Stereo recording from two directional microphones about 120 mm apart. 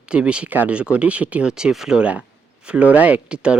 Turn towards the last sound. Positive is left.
turn(degrees=-10)  # may be behind; listen again after turning